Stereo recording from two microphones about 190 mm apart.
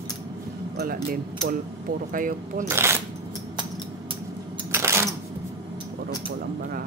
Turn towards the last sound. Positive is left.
turn(degrees=-15)  # may be behind; listen again after turning